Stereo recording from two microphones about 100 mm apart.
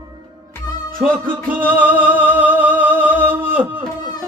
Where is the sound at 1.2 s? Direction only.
20° right (ahead or behind).